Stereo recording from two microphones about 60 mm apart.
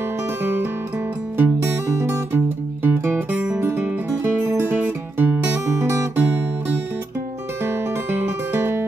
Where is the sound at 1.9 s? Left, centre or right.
Right.